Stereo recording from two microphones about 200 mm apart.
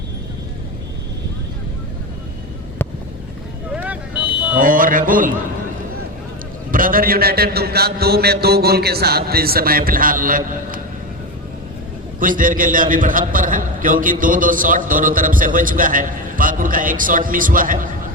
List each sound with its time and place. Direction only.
3.7 s a sound: 5° right (ahead or behind)
4.5 s speech: 45° right (ahead or behind)
6.7 s a man's voice: 45° right (ahead or behind)
12.2 s a man's voice: 45° right (ahead or behind)